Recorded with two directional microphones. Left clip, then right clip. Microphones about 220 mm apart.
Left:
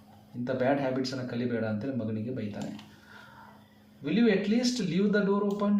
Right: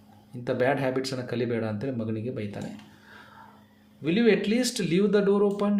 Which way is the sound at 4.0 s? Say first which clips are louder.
Right 4 dB; 50° right (ahead or behind).